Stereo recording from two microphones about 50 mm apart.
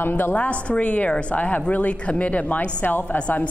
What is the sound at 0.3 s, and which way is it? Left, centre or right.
A woman's voice, left.